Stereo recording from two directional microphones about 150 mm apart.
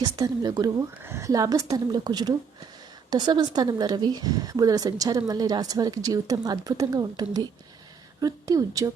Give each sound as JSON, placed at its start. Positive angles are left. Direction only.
{"t": 0.0, "sound": "a woman's voice", "side_deg": -25}